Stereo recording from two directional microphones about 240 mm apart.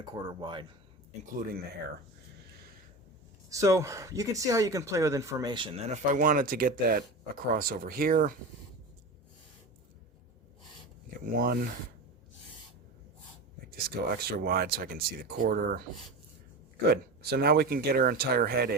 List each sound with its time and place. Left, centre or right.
0.0 s speech: centre
1.2 s speech: right
3.5 s speech: centre; by 8.4 s right
11.3 s speech: right
13.7 s speech: right
16.9 s speech: right